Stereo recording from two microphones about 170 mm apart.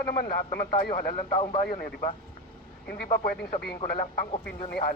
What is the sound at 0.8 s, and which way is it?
Speech, 60° left (ahead or behind).